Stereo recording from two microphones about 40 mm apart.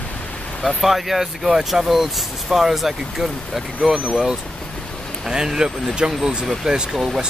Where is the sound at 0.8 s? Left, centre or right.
Centre.